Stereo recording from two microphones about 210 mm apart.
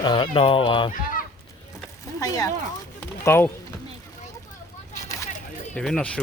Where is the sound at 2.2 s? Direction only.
15° left (ahead or behind).